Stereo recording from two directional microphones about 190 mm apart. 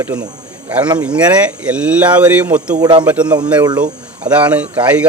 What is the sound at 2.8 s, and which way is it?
Speech, 20° right (ahead or behind).